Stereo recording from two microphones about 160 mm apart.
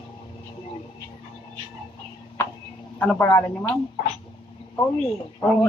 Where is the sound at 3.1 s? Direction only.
15° left (ahead or behind).